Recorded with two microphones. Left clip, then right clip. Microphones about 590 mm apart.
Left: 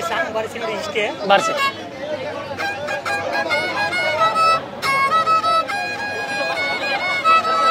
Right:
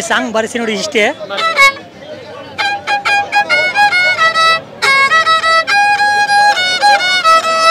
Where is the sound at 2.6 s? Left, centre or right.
Right.